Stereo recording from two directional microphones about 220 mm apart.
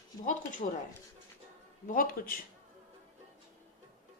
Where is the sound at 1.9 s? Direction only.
40° left (ahead or behind).